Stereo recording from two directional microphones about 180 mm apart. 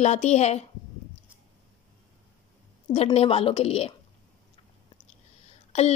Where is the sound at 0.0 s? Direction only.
40° left (ahead or behind).